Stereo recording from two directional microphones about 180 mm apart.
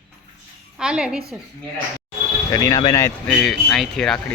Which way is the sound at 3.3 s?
Centre (ahead or behind).